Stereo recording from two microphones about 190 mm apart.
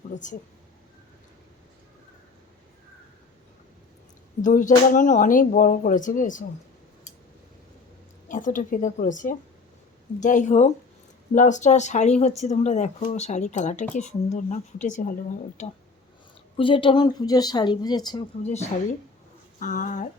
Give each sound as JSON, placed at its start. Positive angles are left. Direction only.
{"t": 0.1, "sound": "speech", "side_deg": 40}
{"t": 4.4, "sound": "speech", "side_deg": 45}
{"t": 8.3, "sound": "speech", "side_deg": 45}
{"t": 16.6, "sound": "speech", "side_deg": 25}
{"t": 18.4, "sound": "speech", "side_deg": 35}